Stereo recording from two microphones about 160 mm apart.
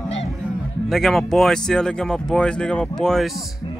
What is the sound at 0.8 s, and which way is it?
Speech, centre (ahead or behind).